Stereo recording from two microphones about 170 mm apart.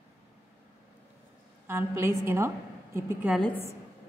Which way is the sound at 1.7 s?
15° right (ahead or behind).